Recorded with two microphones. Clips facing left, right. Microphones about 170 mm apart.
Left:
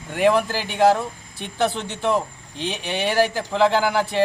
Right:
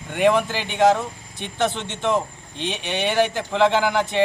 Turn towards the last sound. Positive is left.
turn(degrees=5)  # may be behind; listen again after turning